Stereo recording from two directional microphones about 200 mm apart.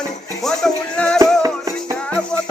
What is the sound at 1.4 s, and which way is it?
Music, 15° right (ahead or behind).